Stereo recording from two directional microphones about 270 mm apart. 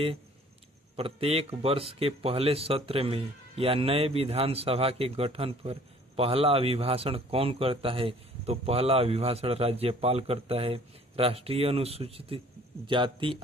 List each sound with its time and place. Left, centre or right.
0.9 s speech: right